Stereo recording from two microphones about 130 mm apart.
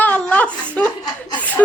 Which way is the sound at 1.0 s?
35° left (ahead or behind).